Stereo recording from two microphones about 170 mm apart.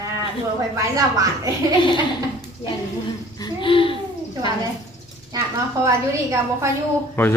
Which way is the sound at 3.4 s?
30° left (ahead or behind).